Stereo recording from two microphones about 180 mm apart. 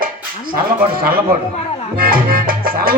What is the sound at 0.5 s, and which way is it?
Speech, 55° right (ahead or behind).